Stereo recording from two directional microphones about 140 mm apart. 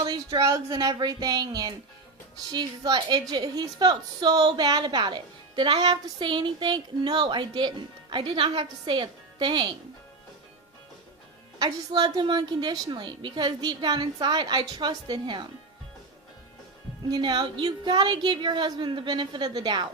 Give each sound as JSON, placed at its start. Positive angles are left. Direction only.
{"t": 0.0, "sound": "a woman's voice", "side_deg": -30}
{"t": 11.6, "sound": "a woman's voice", "side_deg": -30}
{"t": 17.1, "sound": "a woman's voice", "side_deg": -35}